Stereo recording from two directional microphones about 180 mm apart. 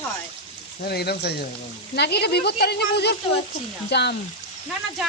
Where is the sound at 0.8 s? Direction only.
60° left (ahead or behind).